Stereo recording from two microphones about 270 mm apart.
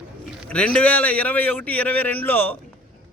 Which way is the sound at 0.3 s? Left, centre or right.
Centre.